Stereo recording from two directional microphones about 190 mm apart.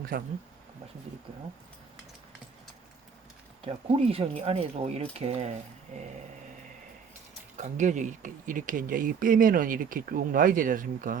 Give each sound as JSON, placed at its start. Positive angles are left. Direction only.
{"t": 0.1, "sound": "speech", "side_deg": -50}
{"t": 3.6, "sound": "speech", "side_deg": -30}
{"t": 7.5, "sound": "speech", "side_deg": -40}